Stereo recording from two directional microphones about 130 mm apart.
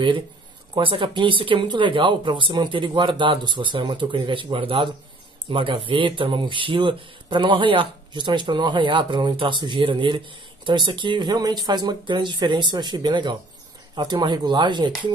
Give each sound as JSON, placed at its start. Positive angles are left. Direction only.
{"t": 0.7, "sound": "speech", "side_deg": -40}